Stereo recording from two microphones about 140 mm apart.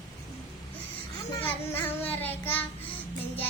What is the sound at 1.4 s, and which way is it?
Child singing, 15° left (ahead or behind).